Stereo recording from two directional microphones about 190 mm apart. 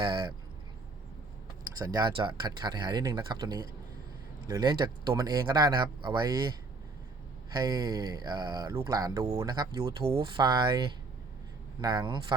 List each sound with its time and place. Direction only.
0.0 s speech: 25° right (ahead or behind)
1.8 s speech: 20° right (ahead or behind)
7.5 s speech: 20° right (ahead or behind)